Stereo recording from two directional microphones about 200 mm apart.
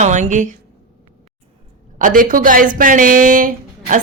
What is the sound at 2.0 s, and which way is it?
A woman's voice, 40° right (ahead or behind).